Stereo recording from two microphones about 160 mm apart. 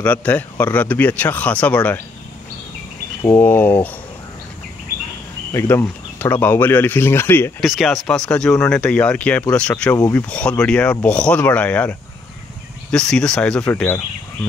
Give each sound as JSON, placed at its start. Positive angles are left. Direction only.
{"t": 0.0, "sound": "speech", "side_deg": 10}
{"t": 3.3, "sound": "speech", "side_deg": 10}
{"t": 5.5, "sound": "speech", "side_deg": 15}
{"t": 7.6, "sound": "speech", "side_deg": 0}